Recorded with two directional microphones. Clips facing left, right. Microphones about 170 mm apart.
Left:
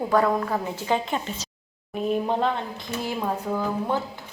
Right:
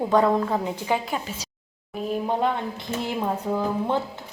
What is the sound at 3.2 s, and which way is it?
Speech, 15° right (ahead or behind).